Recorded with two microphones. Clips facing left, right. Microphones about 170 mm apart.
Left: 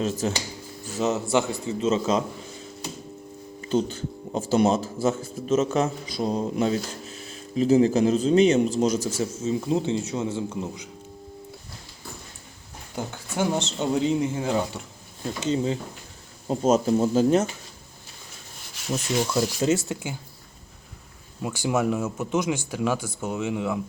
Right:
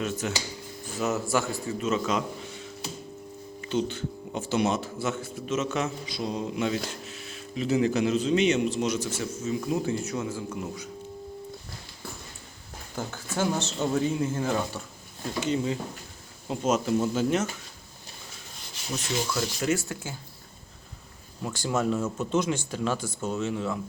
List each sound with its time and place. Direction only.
0.0 s speech: 30° left (ahead or behind)
3.6 s a man's voice: 40° left (ahead or behind)
9.4 s speech: 25° left (ahead or behind)
13.0 s a man's voice: 15° left (ahead or behind); by 17.4 s 35° left (ahead or behind)
19.2 s speech: 30° left (ahead or behind)
19.9 s speech: 15° left (ahead or behind)
21.4 s speech: 10° left (ahead or behind)